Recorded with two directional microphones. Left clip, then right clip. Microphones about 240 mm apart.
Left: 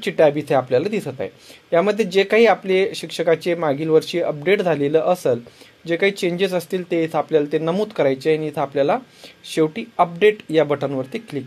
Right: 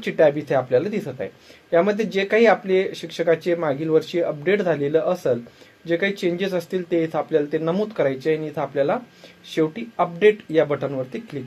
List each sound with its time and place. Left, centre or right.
0.0 s speech: left